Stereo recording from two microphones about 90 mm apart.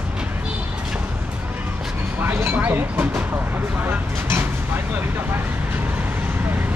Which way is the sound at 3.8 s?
25° right (ahead or behind).